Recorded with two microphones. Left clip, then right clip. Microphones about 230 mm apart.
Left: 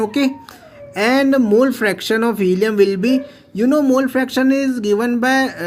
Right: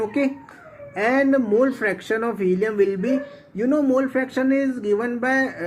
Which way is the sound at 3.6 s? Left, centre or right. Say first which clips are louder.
Left 5 dB; left.